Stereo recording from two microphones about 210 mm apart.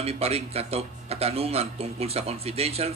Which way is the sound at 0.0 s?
30° right (ahead or behind).